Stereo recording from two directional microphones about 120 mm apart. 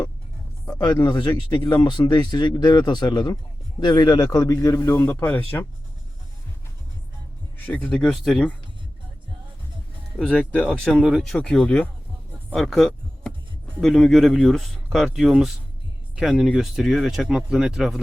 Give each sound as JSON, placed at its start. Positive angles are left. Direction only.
{"t": 0.6, "sound": "a man's voice", "side_deg": 30}
{"t": 5.2, "sound": "speech", "side_deg": 15}
{"t": 7.7, "sound": "speech", "side_deg": 10}
{"t": 10.2, "sound": "speech", "side_deg": 10}